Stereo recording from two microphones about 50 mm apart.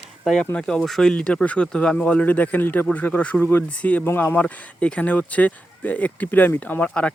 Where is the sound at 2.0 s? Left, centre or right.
Left.